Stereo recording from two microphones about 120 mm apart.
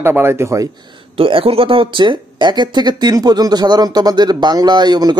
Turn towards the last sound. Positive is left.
turn(degrees=-35)  # may be behind; listen again after turning